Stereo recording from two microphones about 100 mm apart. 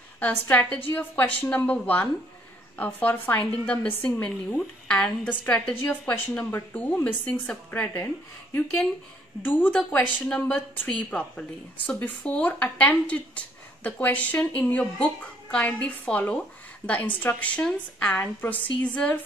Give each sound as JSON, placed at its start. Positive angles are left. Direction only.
{"t": 0.2, "sound": "a woman's voice", "side_deg": 15}
{"t": 9.4, "sound": "a woman's voice", "side_deg": 20}
{"t": 10.2, "sound": "a woman's voice", "side_deg": 5}